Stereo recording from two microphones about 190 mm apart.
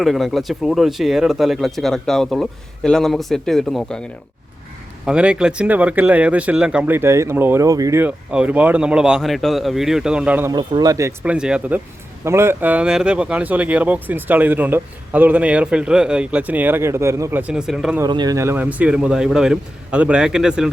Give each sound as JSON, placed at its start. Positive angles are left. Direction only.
{"t": 0.0, "sound": "speech", "side_deg": 0}
{"t": 5.0, "sound": "speech", "side_deg": -5}
{"t": 10.5, "sound": "speech", "side_deg": -25}
{"t": 18.0, "sound": "speech", "side_deg": -20}